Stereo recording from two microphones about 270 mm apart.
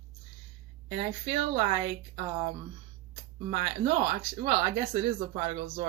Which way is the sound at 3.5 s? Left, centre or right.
Right.